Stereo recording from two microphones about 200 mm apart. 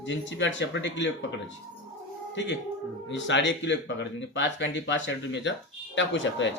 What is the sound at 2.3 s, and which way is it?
Speech, 65° left (ahead or behind).